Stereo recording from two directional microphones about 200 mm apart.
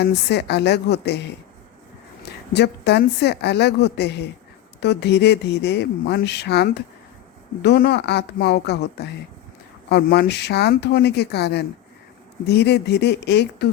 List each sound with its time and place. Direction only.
0.0 s speech: 55° left (ahead or behind)
2.5 s speech: 55° left (ahead or behind)